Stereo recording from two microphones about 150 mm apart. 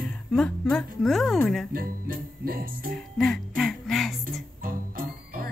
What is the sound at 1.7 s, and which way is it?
Music, 75° right (ahead or behind).